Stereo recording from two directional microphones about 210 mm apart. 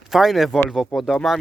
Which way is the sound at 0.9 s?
Centre (ahead or behind).